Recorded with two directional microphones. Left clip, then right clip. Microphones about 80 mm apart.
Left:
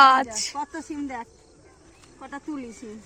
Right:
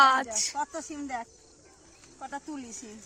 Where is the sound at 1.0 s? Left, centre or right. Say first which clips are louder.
Right 1 dB; centre.